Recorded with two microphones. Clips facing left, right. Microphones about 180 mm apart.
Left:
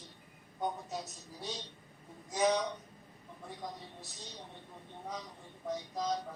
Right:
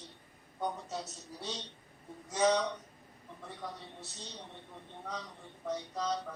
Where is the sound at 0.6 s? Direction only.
15° left (ahead or behind).